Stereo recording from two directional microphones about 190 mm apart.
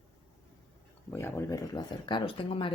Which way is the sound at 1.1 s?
15° left (ahead or behind).